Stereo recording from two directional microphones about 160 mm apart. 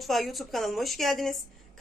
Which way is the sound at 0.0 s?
Centre (ahead or behind).